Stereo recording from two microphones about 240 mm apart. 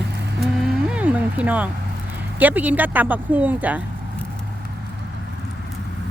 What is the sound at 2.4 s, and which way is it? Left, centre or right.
Speech, centre.